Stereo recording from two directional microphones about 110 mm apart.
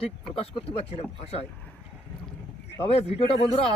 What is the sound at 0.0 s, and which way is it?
Speech, 60° left (ahead or behind).